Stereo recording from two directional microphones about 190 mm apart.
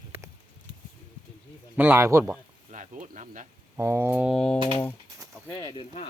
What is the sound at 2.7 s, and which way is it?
Speech, 40° right (ahead or behind).